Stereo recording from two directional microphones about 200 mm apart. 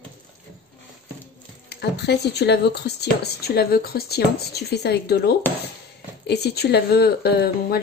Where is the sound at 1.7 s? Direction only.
55° left (ahead or behind).